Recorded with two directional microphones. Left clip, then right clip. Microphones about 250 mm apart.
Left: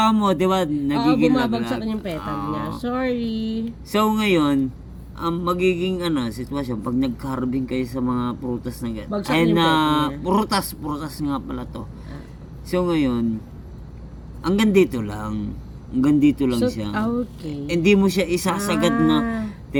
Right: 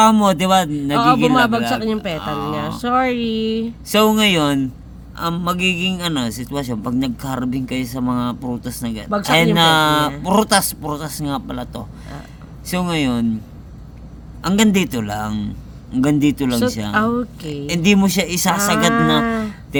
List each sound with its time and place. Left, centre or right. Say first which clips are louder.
0.0 s a man's voice: right 5 dB; right
1.8 s speech: right 6 dB; right
2.1 s a man's voice: right 4 dB; right
2.6 s speech: right 10 dB; right
3.8 s a man's voice: right 5 dB; right
14.4 s a man's voice: even; right
19.0 s a sound: right 4 dB; right